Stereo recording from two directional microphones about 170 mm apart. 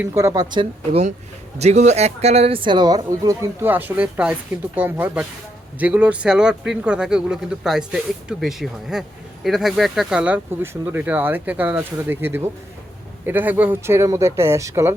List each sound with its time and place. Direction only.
0.0 s speech: 15° right (ahead or behind)
1.5 s speech: 40° right (ahead or behind); by 14.9 s 15° right (ahead or behind)